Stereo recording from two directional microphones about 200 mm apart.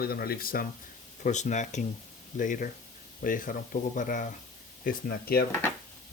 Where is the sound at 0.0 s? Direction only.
50° left (ahead or behind).